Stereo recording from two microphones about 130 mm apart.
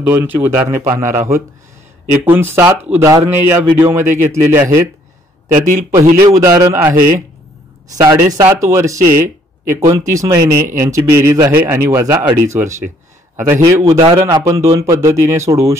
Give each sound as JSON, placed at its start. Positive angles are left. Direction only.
{"t": 0.0, "sound": "speech", "side_deg": -15}
{"t": 2.2, "sound": "speech", "side_deg": -15}
{"t": 5.5, "sound": "speech", "side_deg": -75}
{"t": 6.1, "sound": "speech", "side_deg": -25}
{"t": 8.0, "sound": "speech", "side_deg": -30}